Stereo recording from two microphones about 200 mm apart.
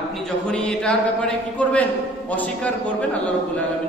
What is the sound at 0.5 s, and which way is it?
A man's voice, 5° left (ahead or behind).